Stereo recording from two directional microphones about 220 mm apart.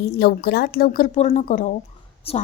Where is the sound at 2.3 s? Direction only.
25° left (ahead or behind).